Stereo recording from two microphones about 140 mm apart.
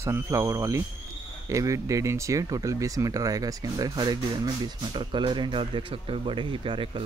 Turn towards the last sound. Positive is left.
turn(degrees=-35)  # may be behind; listen again after turning